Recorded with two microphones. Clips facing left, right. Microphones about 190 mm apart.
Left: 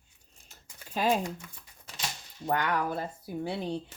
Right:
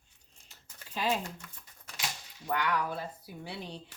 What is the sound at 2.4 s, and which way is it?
Speech, 45° left (ahead or behind).